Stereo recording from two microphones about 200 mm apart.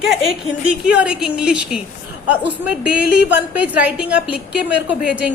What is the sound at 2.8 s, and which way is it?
A woman's voice, 5° right (ahead or behind).